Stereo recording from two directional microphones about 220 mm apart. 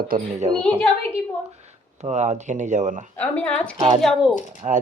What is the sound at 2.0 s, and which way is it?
Speech, 30° right (ahead or behind).